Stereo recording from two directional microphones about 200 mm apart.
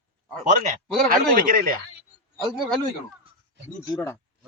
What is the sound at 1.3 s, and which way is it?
Speech, 45° right (ahead or behind).